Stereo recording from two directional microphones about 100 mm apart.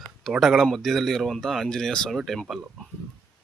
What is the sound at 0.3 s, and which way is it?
Speech, centre (ahead or behind).